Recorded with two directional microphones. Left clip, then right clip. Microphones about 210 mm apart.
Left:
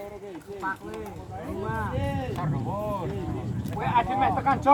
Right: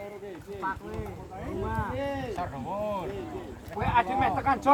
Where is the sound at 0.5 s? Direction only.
25° right (ahead or behind).